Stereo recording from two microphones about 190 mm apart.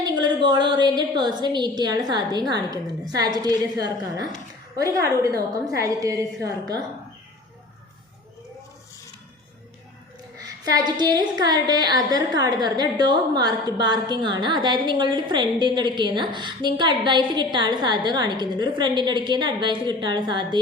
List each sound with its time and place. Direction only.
0.0 s a woman's voice: 20° right (ahead or behind)
10.7 s a woman's voice: 20° right (ahead or behind)